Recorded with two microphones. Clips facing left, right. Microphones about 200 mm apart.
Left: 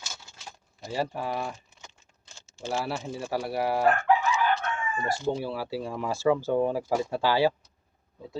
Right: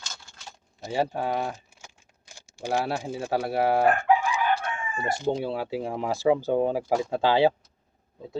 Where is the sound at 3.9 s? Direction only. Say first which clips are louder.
Right 1 dB; 10° right (ahead or behind).